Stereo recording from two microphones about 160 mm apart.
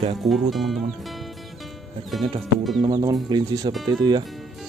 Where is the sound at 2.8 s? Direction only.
25° right (ahead or behind).